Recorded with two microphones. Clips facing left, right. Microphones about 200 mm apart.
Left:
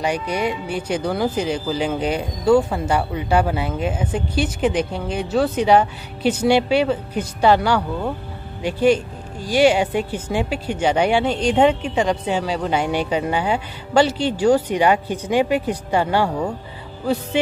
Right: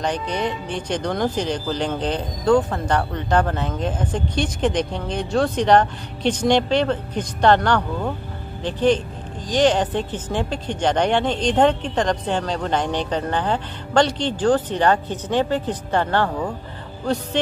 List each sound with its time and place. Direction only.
0.0 s speech: 10° left (ahead or behind)